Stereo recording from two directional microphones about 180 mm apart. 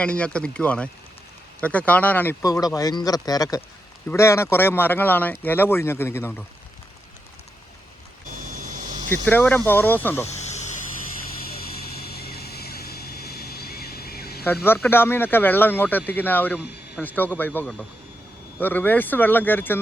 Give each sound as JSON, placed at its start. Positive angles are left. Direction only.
{"t": 0.0, "sound": "speech", "side_deg": 5}
{"t": 9.0, "sound": "speech", "side_deg": 10}
{"t": 10.2, "sound": "snake", "side_deg": 40}
{"t": 12.1, "sound": "vehicle", "side_deg": 60}
{"t": 14.4, "sound": "speech", "side_deg": 10}